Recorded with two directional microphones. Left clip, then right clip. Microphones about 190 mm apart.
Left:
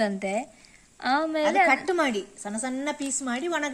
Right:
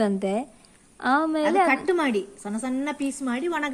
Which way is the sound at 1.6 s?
20° left (ahead or behind).